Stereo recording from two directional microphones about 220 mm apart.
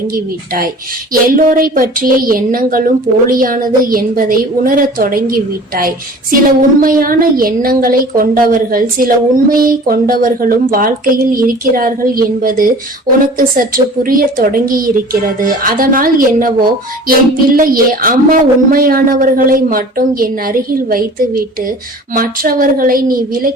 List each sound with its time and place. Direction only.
0.1 s a woman's voice: 40° right (ahead or behind)